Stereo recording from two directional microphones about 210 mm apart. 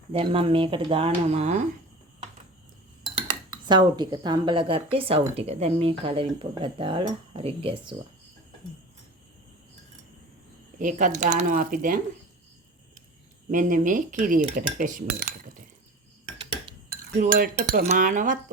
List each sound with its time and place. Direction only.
0.1 s speech: 25° right (ahead or behind)
3.0 s speech: 20° right (ahead or behind)
10.8 s cutlery: 35° right (ahead or behind)
13.5 s cutlery: 40° right (ahead or behind)
16.9 s cutlery: 45° right (ahead or behind)